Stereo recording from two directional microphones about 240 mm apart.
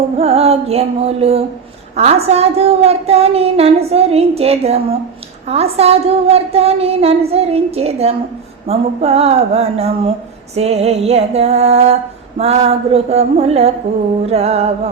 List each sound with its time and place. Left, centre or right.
0.2 s a woman's voice: right